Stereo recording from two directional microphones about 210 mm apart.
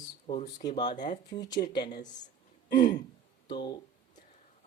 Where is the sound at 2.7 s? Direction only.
40° left (ahead or behind).